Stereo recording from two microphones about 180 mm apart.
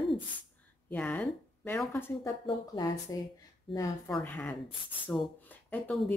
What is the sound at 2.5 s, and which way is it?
Speech, 25° left (ahead or behind).